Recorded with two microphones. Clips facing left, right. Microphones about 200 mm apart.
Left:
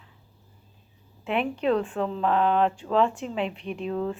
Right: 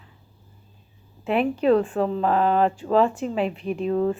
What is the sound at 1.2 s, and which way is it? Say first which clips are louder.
Speech: right 5 dB; 40° right (ahead or behind).